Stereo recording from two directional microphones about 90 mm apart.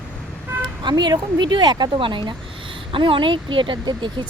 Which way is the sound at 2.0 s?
65° right (ahead or behind).